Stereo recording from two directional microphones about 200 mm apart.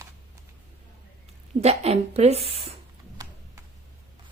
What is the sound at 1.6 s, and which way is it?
A woman's voice, 30° right (ahead or behind).